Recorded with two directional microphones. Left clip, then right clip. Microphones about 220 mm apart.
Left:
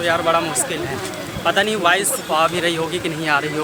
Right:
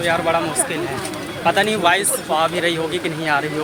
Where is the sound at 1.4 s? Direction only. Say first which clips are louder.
Right 1 dB; 5° left (ahead or behind).